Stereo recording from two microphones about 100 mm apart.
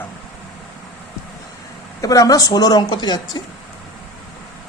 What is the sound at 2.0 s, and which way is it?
Speech, 35° left (ahead or behind).